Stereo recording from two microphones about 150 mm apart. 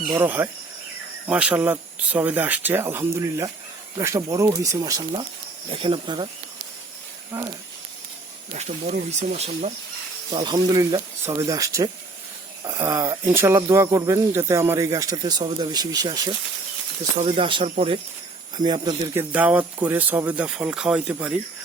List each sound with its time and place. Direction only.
0.1 s speech: 15° right (ahead or behind)
5.6 s speech: 35° right (ahead or behind)
8.5 s speech: 55° right (ahead or behind)
10.3 s speech: 30° right (ahead or behind)
19.1 s speech: 10° right (ahead or behind)